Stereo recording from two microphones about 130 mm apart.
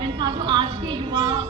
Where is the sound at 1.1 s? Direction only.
25° right (ahead or behind).